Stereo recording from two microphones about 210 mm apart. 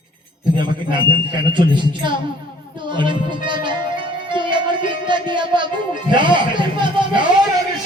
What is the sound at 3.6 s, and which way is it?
Music, 20° right (ahead or behind).